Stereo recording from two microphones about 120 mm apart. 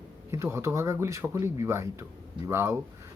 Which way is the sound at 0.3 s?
20° right (ahead or behind).